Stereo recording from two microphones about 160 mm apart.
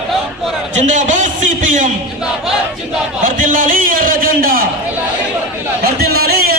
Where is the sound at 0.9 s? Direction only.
50° right (ahead or behind).